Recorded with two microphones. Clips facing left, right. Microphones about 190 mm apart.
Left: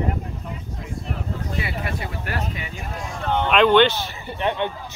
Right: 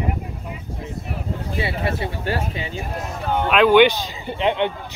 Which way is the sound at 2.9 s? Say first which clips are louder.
Even; 5° right (ahead or behind).